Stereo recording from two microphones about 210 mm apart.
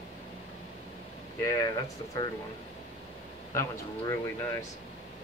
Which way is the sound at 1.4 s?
15° left (ahead or behind).